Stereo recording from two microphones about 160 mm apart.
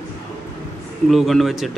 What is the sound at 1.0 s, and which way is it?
Speech, centre (ahead or behind).